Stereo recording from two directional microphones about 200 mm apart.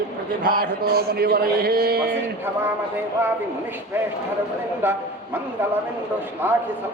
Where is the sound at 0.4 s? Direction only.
45° right (ahead or behind).